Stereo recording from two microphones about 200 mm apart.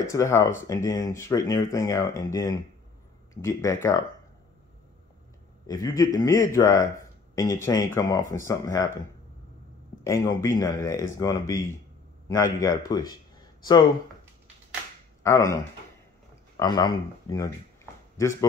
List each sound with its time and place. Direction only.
0.0 s speech: 15° left (ahead or behind)
5.7 s speech: 15° left (ahead or behind)
10.0 s speech: 15° left (ahead or behind)
15.2 s speech: 15° left (ahead or behind)
16.5 s speech: 20° left (ahead or behind)